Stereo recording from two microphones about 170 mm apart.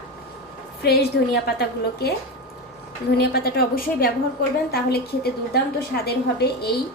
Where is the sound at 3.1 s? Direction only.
65° left (ahead or behind).